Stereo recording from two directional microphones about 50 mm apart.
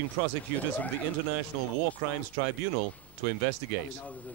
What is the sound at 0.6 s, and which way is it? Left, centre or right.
Speech, left.